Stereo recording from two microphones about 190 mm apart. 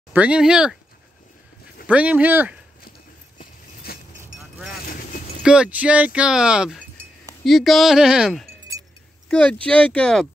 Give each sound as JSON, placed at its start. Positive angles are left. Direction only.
{"t": 0.1, "sound": "speech", "side_deg": -5}
{"t": 1.9, "sound": "speech", "side_deg": -5}
{"t": 3.3, "sound": "a sound", "side_deg": 55}
{"t": 5.4, "sound": "speech", "side_deg": -5}
{"t": 9.3, "sound": "speech", "side_deg": 5}